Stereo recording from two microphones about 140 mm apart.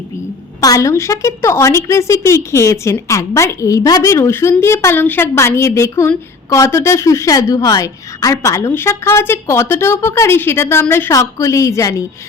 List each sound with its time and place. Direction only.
0.6 s a woman's voice: 25° left (ahead or behind)